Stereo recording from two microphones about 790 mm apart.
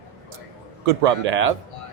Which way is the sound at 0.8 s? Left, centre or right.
Right.